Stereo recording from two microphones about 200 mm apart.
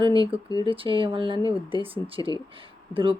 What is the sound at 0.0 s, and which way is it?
Speech, 25° right (ahead or behind).